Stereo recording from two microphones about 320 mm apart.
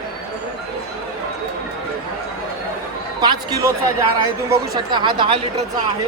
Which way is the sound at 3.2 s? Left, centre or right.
Centre.